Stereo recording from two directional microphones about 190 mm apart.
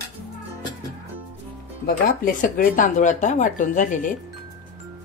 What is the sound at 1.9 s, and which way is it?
Speech, 50° left (ahead or behind).